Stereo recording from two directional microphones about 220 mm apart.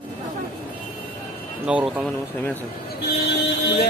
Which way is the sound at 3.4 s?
50° left (ahead or behind).